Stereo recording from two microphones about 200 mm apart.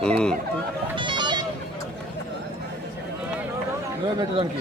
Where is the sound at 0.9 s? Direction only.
25° right (ahead or behind).